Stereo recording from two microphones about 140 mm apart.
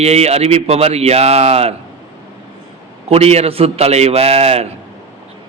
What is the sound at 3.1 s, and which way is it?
A man's voice, 50° right (ahead or behind).